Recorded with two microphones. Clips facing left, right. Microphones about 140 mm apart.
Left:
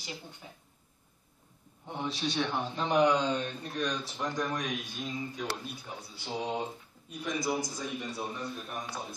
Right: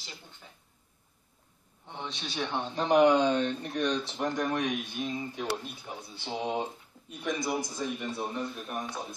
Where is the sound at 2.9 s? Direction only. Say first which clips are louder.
Right 4 dB; 55° right (ahead or behind).